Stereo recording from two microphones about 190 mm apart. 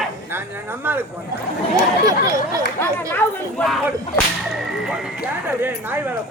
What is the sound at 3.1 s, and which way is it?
Speech, 5° left (ahead or behind).